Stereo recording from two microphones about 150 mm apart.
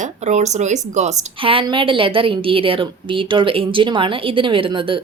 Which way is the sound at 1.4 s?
35° right (ahead or behind).